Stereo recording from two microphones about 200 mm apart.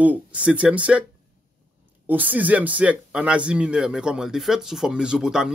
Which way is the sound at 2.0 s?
10° right (ahead or behind).